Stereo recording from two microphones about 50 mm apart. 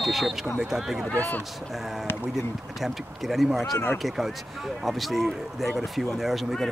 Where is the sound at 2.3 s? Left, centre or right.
Centre.